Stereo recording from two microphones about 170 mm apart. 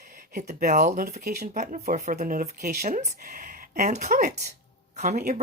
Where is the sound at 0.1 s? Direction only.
50° right (ahead or behind).